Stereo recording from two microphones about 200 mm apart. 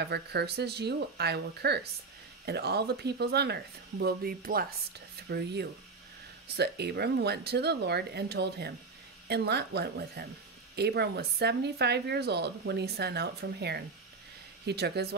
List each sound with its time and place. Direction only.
0.0 s speech: 55° right (ahead or behind)